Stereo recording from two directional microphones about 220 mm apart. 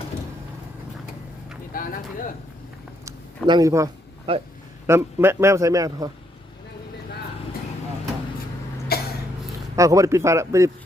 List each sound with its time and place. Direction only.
1.7 s speech: 40° left (ahead or behind)
3.1 s a sound: 15° right (ahead or behind)
4.3 s speech: 25° right (ahead or behind)
4.9 s speech: 10° right (ahead or behind)
8.9 s cough: 45° left (ahead or behind)
9.7 s speech: 15° right (ahead or behind)